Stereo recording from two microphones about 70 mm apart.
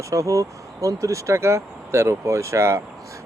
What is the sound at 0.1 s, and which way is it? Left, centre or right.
Speech, right.